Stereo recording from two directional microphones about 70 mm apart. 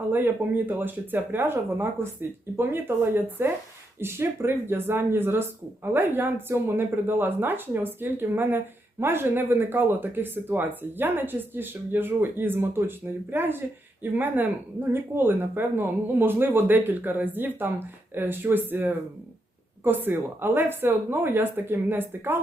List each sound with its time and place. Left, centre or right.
0.1 s speech: right